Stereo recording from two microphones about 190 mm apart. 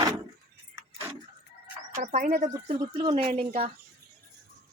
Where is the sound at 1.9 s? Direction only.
40° right (ahead or behind).